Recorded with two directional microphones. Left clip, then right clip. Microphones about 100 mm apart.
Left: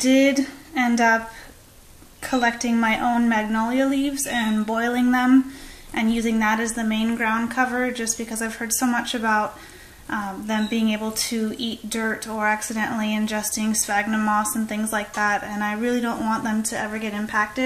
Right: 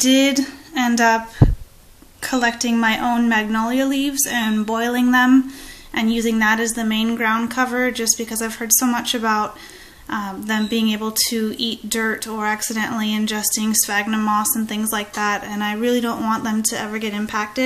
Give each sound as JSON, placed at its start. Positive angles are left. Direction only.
{"t": 0.0, "sound": "speech", "side_deg": -15}
{"t": 2.2, "sound": "a woman's voice", "side_deg": -15}